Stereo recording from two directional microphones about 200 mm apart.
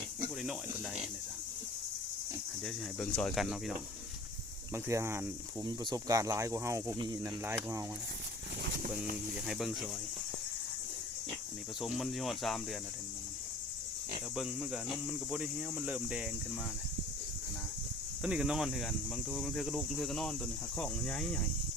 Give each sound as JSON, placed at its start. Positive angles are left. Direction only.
{"t": 2.6, "sound": "speech", "side_deg": 5}
{"t": 4.7, "sound": "speech", "side_deg": -15}
{"t": 9.5, "sound": "speech", "side_deg": 0}
{"t": 11.8, "sound": "speech", "side_deg": 0}
{"t": 14.3, "sound": "speech", "side_deg": 0}
{"t": 18.2, "sound": "speech", "side_deg": -5}